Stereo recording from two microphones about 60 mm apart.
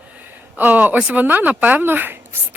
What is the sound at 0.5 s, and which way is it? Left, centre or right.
Speech, right.